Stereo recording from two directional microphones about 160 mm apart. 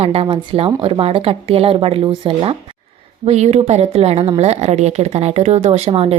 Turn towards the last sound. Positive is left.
turn(degrees=-40)  # may be behind; listen again after turning